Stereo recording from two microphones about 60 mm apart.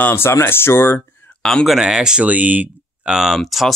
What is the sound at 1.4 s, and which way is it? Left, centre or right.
Speech, centre.